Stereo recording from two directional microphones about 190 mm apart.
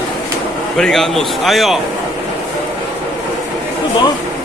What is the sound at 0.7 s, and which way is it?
A man's voice, centre (ahead or behind).